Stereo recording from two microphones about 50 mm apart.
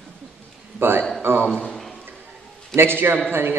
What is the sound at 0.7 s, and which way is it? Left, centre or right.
Speech, right.